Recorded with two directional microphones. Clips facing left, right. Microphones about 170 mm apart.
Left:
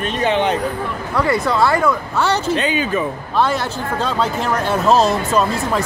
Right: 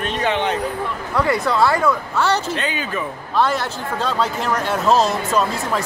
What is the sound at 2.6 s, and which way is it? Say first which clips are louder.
Speech: left 6 dB; 20° left (ahead or behind).